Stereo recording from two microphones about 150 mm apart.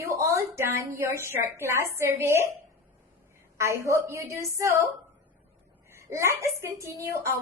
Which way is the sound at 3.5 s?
20° right (ahead or behind).